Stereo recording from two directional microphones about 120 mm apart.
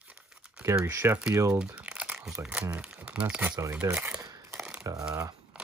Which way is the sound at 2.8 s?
10° right (ahead or behind).